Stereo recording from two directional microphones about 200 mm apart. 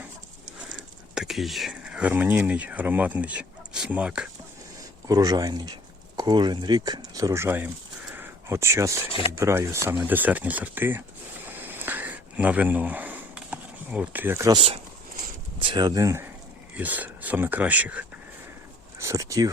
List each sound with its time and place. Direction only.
0.7 s speech: 5° right (ahead or behind)
5.0 s speech: 20° right (ahead or behind)
8.1 s a sound: 10° right (ahead or behind)
9.4 s speech: 15° right (ahead or behind)
11.4 s a sound: 10° right (ahead or behind)
15.5 s speech: 25° right (ahead or behind)